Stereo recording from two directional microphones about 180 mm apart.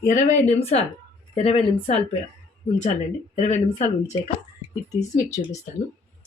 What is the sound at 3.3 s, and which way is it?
Speech, 40° left (ahead or behind).